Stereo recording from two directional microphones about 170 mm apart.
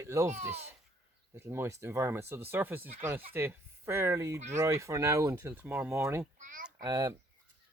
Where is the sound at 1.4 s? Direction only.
15° right (ahead or behind).